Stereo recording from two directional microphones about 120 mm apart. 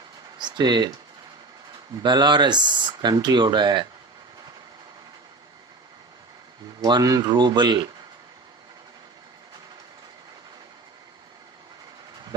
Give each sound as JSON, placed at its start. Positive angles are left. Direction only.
{"t": 0.3, "sound": "speech", "side_deg": -35}
{"t": 2.0, "sound": "speech", "side_deg": -35}
{"t": 6.8, "sound": "speech", "side_deg": -35}